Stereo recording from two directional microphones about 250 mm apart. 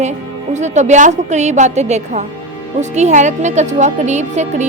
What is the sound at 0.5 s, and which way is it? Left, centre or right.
A woman's voice, right.